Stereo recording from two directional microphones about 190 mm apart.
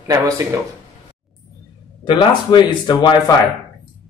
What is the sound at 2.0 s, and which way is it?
Speech, 25° left (ahead or behind).